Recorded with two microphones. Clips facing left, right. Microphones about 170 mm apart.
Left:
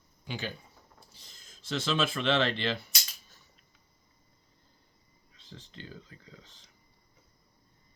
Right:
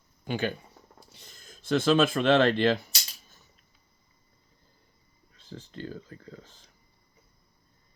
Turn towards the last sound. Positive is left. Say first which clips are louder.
# right 7 dB
turn(degrees=-50)  # may be behind; listen again after turning